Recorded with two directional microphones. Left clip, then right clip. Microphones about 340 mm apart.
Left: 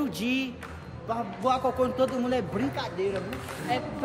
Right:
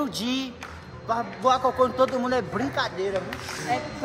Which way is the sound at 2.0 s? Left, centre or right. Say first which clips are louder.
Right 4 dB; centre.